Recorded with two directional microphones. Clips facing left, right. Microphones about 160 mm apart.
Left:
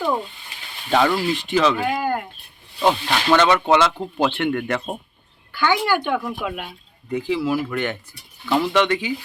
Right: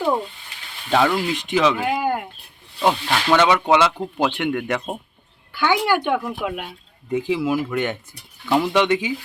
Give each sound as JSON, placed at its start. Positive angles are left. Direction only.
{"t": 0.9, "sound": "speech", "side_deg": 0}
{"t": 1.3, "sound": "speech", "side_deg": -15}
{"t": 7.1, "sound": "speech", "side_deg": -20}